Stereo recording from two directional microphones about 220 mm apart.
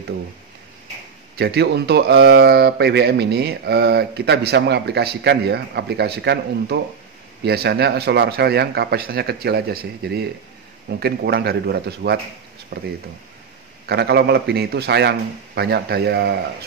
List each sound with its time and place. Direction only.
1.3 s speech: 50° right (ahead or behind)